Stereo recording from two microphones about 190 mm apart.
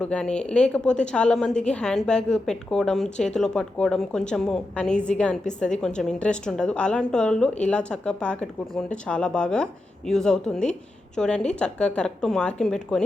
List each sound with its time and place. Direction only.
0.0 s a woman's voice: 5° left (ahead or behind)